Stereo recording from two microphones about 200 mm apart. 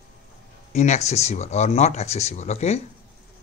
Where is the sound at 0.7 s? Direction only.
35° left (ahead or behind).